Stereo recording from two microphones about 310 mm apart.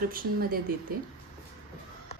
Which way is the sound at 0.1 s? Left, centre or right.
Right.